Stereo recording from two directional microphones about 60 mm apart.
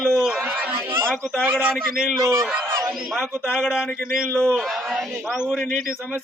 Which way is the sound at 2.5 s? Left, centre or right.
Right.